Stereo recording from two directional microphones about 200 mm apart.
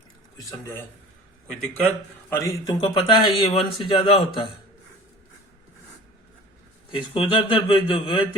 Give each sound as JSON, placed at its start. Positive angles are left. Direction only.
{"t": 0.3, "sound": "speech", "side_deg": 15}
{"t": 2.3, "sound": "a man's voice", "side_deg": 15}
{"t": 6.9, "sound": "a man's voice", "side_deg": 25}